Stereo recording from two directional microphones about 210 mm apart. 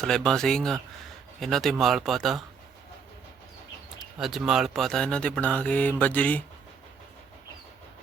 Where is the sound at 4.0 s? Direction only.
Centre (ahead or behind).